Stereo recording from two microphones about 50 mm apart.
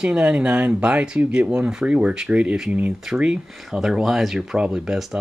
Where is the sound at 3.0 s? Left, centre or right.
Centre.